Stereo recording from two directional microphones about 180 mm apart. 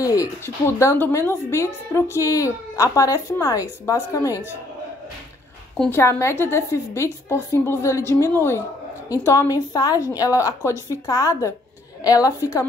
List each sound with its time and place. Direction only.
0.0 s speech: 15° left (ahead or behind)
5.8 s a woman's voice: 10° left (ahead or behind)